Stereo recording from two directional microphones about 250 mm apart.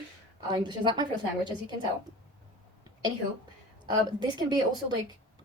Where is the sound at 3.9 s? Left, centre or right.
Centre.